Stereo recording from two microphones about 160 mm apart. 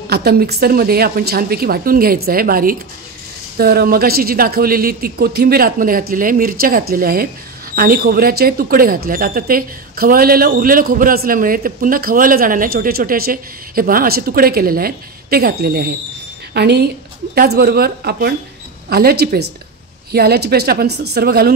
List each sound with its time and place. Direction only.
0.1 s speech: 80° right
16.5 s a woman's voice: 90° right
17.4 s speech: 75° right (ahead or behind)
20.1 s speech: 80° right